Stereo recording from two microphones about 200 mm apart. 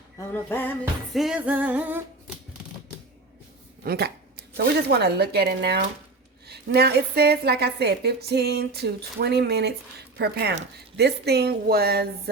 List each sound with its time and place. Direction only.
0.3 s music: 10° left (ahead or behind)
1.2 s singing: 5° right (ahead or behind)
3.8 s a woman's voice: 55° right (ahead or behind)